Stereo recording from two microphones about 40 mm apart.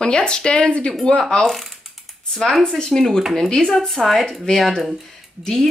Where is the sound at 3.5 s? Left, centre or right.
Centre.